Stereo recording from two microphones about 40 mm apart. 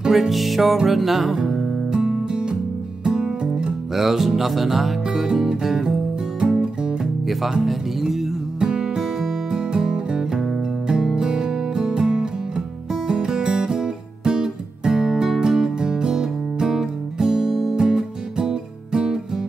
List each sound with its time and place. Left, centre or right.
0.1 s music: centre
3.9 s music: centre